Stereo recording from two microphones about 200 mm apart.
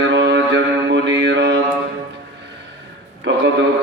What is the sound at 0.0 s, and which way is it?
Mantra, 60° right (ahead or behind).